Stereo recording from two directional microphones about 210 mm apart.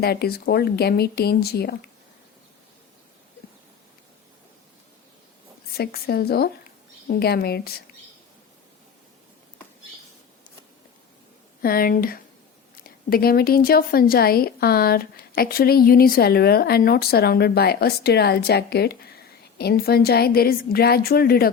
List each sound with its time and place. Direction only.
0.0 s speech: 50° left (ahead or behind)
5.7 s speech: 50° left (ahead or behind)
11.6 s speech: 45° left (ahead or behind)